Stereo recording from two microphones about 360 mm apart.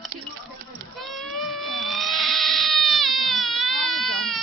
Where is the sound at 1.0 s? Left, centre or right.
Centre.